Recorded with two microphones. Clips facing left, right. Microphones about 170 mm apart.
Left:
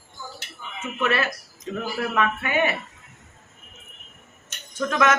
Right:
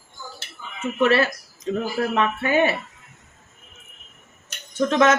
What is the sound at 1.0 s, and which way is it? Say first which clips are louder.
Speech: right 6 dB; 30° right (ahead or behind).